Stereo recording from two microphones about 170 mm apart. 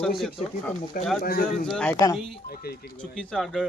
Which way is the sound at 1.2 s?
60° left (ahead or behind).